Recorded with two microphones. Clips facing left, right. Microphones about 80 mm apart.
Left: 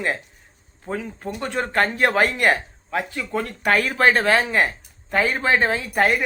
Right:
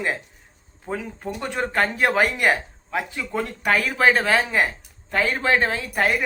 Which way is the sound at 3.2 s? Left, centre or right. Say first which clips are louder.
Left 1 dB; centre.